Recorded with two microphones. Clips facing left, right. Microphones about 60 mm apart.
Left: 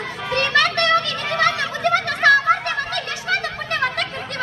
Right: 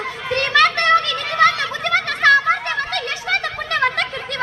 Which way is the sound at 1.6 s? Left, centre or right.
Right.